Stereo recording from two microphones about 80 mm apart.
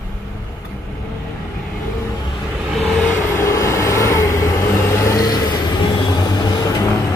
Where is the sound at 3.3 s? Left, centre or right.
Left.